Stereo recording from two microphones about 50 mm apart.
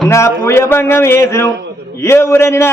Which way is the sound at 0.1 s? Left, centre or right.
Left.